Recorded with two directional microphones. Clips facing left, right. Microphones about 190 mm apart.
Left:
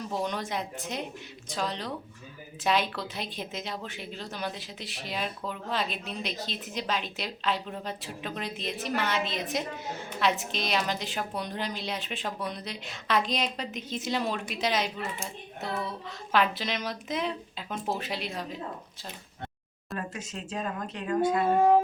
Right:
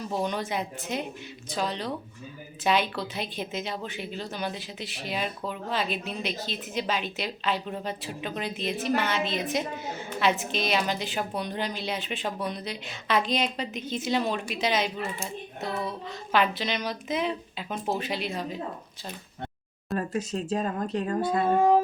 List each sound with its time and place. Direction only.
0.1 s speech: centre (ahead or behind)
20.0 s speech: 35° right (ahead or behind)